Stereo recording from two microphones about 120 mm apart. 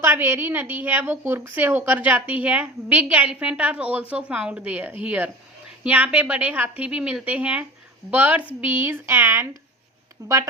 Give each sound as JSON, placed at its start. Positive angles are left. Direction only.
{"t": 0.0, "sound": "a woman's voice", "side_deg": -20}